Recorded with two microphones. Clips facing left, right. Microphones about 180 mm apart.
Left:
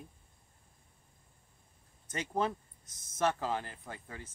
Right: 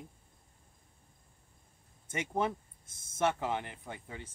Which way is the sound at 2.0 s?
25° right (ahead or behind).